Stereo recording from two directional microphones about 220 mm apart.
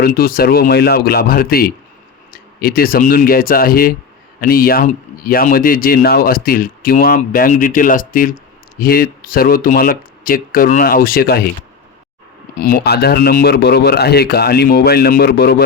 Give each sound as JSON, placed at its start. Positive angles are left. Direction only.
{"t": 0.0, "sound": "speech", "side_deg": 45}
{"t": 12.5, "sound": "speech", "side_deg": 40}